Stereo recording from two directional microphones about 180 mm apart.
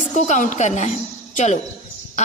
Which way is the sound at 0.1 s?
40° left (ahead or behind).